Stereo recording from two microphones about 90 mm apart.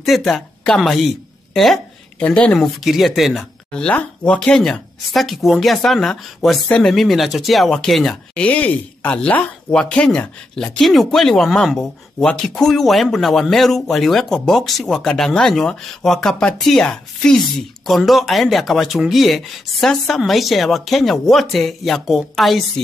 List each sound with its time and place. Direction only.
0.0 s speech: centre (ahead or behind)
2.1 s speech: 15° left (ahead or behind)
2.6 s speech: centre (ahead or behind)
3.7 s speech: 10° left (ahead or behind)
8.4 s speech: 15° left (ahead or behind); by 22.6 s centre (ahead or behind)